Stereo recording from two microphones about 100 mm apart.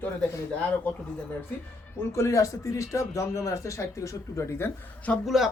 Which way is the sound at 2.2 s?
35° left (ahead or behind).